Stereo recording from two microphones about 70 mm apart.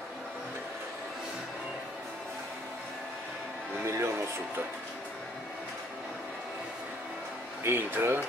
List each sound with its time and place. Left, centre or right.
3.8 s music: right
7.6 s speech: right